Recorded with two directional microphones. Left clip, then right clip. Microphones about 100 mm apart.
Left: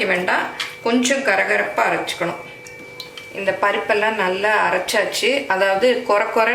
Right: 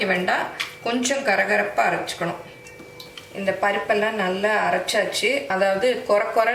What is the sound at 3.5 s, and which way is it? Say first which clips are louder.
Speech: left 3 dB; 20° left (ahead or behind).